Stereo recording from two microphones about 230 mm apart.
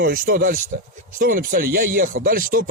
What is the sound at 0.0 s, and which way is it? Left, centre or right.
Speech, right.